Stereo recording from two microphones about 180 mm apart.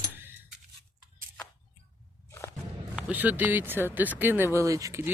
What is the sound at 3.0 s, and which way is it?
Speech, 10° right (ahead or behind).